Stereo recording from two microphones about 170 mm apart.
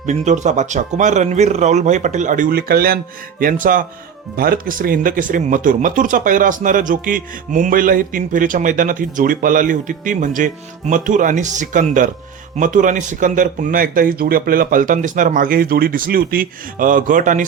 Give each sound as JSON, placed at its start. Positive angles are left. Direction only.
{"t": 0.0, "sound": "speech", "side_deg": -45}